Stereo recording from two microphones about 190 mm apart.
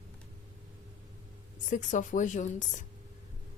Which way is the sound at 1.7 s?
40° left (ahead or behind).